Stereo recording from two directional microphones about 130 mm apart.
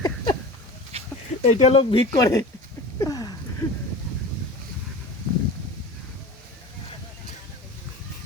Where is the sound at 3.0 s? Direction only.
30° left (ahead or behind).